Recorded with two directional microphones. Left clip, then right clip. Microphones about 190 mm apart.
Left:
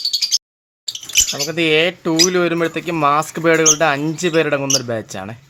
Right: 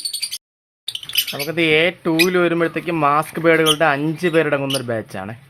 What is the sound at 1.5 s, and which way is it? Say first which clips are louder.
Speech: right 3 dB; 5° left (ahead or behind).